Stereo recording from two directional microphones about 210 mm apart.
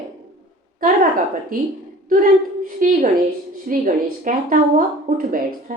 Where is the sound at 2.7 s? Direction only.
40° right (ahead or behind).